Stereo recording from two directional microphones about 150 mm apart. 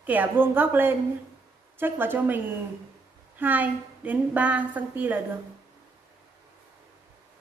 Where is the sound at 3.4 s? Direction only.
10° right (ahead or behind).